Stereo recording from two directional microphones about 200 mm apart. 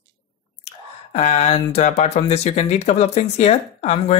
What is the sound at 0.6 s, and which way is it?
Speech, 35° left (ahead or behind).